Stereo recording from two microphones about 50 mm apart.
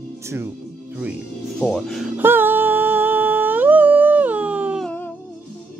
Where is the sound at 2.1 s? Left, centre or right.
Right.